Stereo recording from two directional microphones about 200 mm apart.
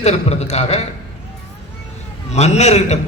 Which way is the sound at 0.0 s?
35° left (ahead or behind).